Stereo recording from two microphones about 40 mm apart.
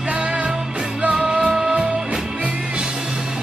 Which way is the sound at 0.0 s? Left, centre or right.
Right.